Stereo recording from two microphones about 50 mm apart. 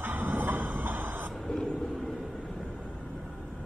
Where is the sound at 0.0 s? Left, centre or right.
Right.